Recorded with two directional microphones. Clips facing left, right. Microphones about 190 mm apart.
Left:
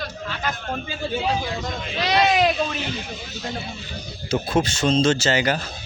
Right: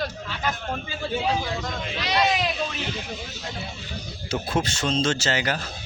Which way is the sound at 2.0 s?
65° left (ahead or behind).